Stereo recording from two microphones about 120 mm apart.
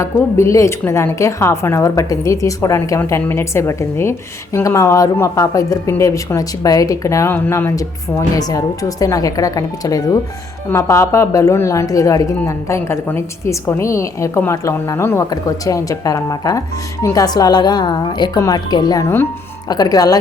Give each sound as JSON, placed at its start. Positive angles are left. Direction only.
{"t": 0.0, "sound": "a woman's voice", "side_deg": 25}
{"t": 8.4, "sound": "a woman's voice", "side_deg": 30}